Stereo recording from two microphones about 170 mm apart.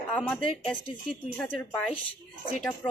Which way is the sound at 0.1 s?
5° left (ahead or behind).